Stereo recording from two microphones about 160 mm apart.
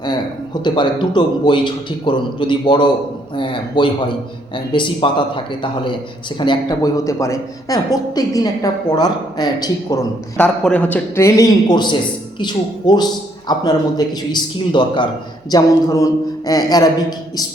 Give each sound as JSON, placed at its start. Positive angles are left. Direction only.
{"t": 0.6, "sound": "a man's voice", "side_deg": 30}
{"t": 10.3, "sound": "a man's voice", "side_deg": 5}